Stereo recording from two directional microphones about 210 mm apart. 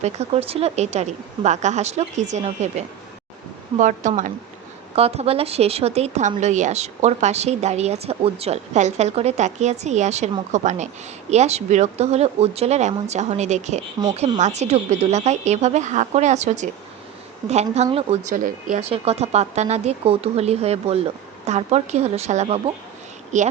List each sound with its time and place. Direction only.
0.0 s a woman's voice: 30° right (ahead or behind)